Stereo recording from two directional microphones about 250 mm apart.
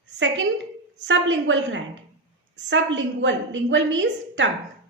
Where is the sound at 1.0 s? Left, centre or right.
Right.